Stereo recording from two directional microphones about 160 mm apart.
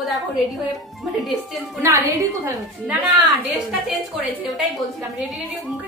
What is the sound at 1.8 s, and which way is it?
Speech, 20° right (ahead or behind).